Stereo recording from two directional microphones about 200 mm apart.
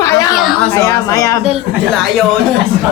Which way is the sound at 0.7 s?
15° left (ahead or behind).